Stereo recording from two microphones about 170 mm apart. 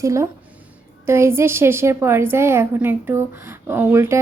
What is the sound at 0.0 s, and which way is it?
A woman's voice, 20° right (ahead or behind).